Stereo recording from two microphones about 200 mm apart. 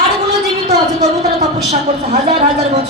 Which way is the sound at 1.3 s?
35° right (ahead or behind).